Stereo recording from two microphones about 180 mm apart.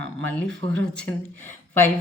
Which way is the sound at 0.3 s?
10° left (ahead or behind).